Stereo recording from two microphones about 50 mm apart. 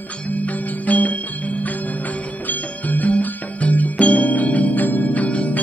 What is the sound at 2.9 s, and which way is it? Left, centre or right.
Music, left.